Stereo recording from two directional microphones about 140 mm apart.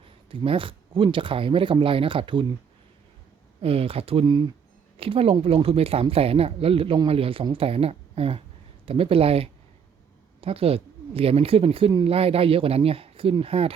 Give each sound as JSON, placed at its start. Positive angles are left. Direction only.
{"t": 0.3, "sound": "speech", "side_deg": -40}
{"t": 3.6, "sound": "speech", "side_deg": -45}